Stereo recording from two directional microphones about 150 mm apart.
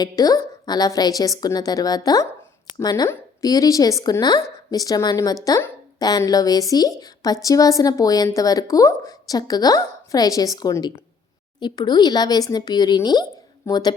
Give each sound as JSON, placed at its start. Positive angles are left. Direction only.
{"t": 0.0, "sound": "speech", "side_deg": 25}